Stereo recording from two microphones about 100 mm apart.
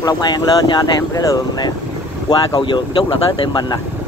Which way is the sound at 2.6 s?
55° left (ahead or behind).